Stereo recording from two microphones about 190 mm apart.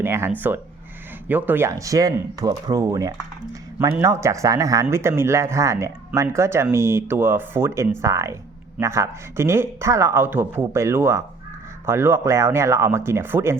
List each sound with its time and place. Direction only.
0.0 s speech: 10° right (ahead or behind)